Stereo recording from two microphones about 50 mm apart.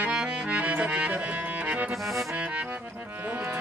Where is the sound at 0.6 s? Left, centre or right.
Right.